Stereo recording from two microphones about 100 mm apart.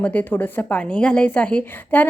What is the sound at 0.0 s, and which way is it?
A woman's voice, 15° left (ahead or behind).